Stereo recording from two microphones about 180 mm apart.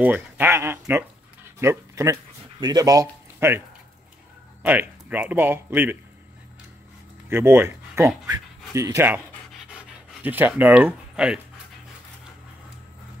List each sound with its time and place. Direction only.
0.0 s speech: 10° right (ahead or behind)
4.6 s speech: 10° right (ahead or behind)
7.2 s speech: 15° right (ahead or behind)
9.7 s pant: 10° right (ahead or behind)